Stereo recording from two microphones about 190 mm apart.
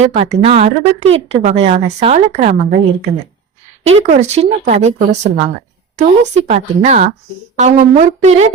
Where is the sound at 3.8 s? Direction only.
40° right (ahead or behind).